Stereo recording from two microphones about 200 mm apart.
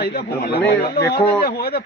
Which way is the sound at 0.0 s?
50° left (ahead or behind).